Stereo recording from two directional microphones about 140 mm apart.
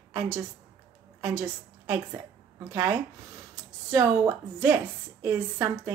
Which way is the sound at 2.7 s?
20° right (ahead or behind).